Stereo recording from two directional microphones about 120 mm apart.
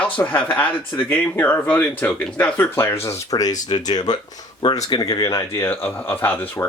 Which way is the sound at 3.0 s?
25° left (ahead or behind).